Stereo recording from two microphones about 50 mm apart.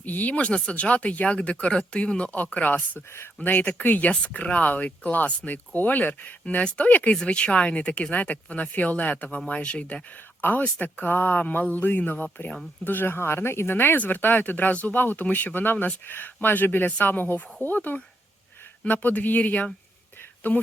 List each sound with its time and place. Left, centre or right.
0.0 s speech: left
4.1 s speech: left
7.2 s speech: left
10.6 s speech: left